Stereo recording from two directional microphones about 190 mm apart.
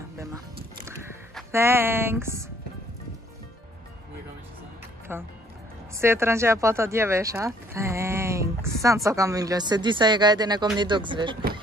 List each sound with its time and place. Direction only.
1.5 s speech: 15° right (ahead or behind)
5.1 s speech: 10° right (ahead or behind)